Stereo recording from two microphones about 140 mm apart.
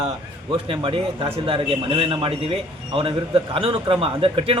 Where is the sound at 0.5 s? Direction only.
40° right (ahead or behind).